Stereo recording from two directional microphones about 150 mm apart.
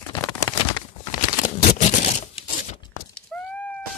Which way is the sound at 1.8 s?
55° left (ahead or behind).